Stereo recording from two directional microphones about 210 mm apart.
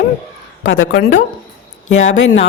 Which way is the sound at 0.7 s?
70° left (ahead or behind).